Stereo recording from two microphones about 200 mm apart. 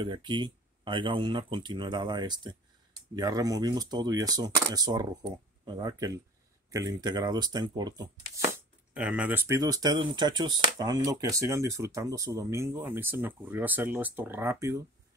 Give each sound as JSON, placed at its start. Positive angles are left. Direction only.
{"t": 0.0, "sound": "speech", "side_deg": -25}
{"t": 8.9, "sound": "speech", "side_deg": -5}